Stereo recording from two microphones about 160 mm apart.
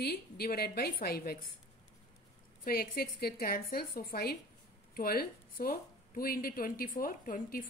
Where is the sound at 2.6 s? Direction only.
70° left (ahead or behind).